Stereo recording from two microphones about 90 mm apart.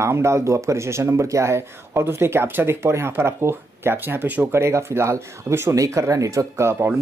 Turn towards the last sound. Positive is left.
turn(degrees=-30)  # may be behind; listen again after turning